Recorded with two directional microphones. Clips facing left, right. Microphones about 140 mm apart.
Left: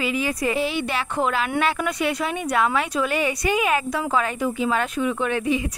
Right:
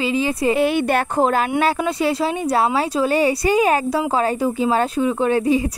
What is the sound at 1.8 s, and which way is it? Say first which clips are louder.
Speech: right 4 dB; 30° right (ahead or behind).